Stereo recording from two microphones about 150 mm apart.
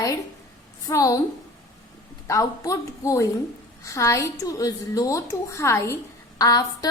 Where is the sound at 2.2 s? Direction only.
20° left (ahead or behind).